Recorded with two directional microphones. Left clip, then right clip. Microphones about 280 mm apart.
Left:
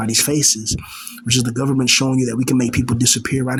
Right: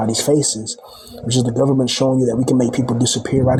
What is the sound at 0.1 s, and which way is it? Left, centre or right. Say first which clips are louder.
Speech: left 3 dB; left.